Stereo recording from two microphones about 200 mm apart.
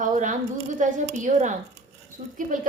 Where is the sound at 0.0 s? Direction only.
40° right (ahead or behind).